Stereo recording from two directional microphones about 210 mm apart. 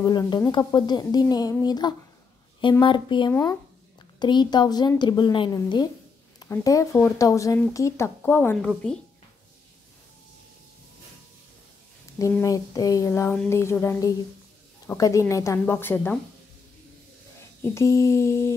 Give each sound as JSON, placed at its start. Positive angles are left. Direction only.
{"t": 0.0, "sound": "speech", "side_deg": 20}
{"t": 12.2, "sound": "speech", "side_deg": 15}
{"t": 17.6, "sound": "speech", "side_deg": 15}